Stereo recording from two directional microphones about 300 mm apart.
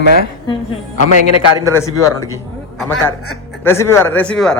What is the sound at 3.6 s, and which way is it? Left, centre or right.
Speech, centre.